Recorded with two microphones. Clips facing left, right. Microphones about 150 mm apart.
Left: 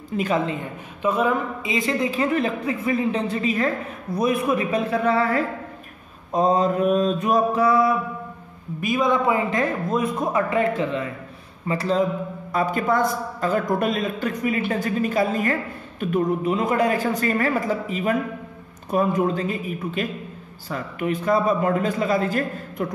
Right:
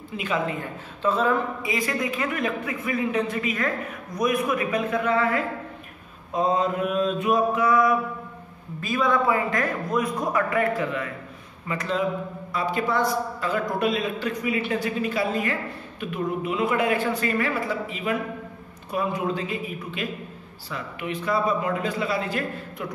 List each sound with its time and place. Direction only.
0.1 s a man's voice: 45° left (ahead or behind)
0.5 s a woman's voice: 15° left (ahead or behind); by 5.4 s 35° left (ahead or behind)
6.3 s mantra: 40° left (ahead or behind)
8.8 s a woman's voice: 20° left (ahead or behind)
11.6 s mantra: 30° left (ahead or behind)
12.5 s a man's voice: 50° left (ahead or behind)